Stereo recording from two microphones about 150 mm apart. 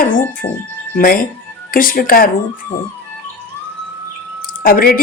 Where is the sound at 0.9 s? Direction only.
70° left (ahead or behind).